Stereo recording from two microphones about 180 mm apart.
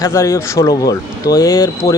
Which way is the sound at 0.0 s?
15° left (ahead or behind).